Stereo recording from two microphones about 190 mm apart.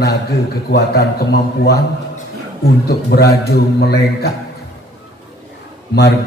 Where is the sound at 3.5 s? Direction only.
60° left (ahead or behind).